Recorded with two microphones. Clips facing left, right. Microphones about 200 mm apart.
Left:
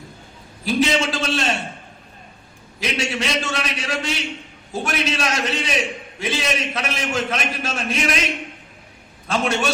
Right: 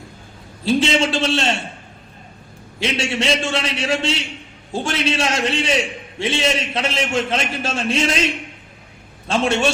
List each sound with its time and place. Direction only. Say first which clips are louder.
0.6 s a man's voice: right 2 dB; 25° right (ahead or behind)
2.8 s a man's voice: right 3 dB; 30° right (ahead or behind)